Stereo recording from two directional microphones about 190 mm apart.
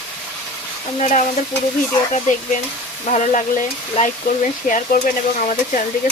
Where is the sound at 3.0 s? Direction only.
40° left (ahead or behind).